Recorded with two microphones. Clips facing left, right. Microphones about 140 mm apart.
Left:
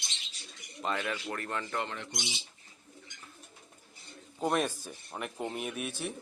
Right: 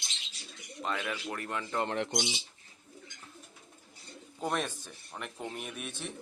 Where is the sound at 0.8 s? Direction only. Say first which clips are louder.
Left 1 dB; centre (ahead or behind).